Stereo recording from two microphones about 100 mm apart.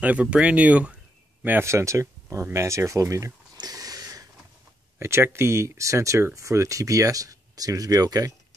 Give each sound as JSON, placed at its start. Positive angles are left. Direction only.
{"t": 0.0, "sound": "speech", "side_deg": -15}
{"t": 3.5, "sound": "a sound", "side_deg": -40}
{"t": 4.9, "sound": "speech", "side_deg": -25}